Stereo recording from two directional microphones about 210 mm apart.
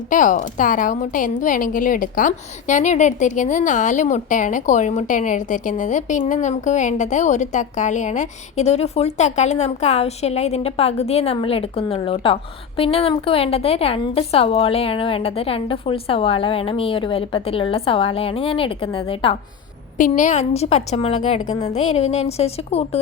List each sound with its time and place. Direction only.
0.1 s a woman's voice: 40° left (ahead or behind)
20.0 s a woman's voice: 40° left (ahead or behind)